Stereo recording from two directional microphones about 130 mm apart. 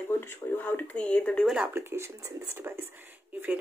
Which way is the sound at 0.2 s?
15° left (ahead or behind).